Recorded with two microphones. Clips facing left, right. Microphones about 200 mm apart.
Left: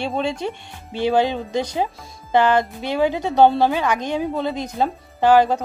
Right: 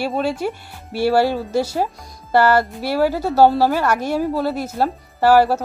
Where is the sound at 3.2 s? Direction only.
5° right (ahead or behind).